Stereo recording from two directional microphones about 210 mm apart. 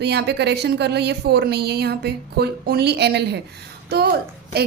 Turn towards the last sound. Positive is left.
turn(degrees=-50)  # may be behind; listen again after turning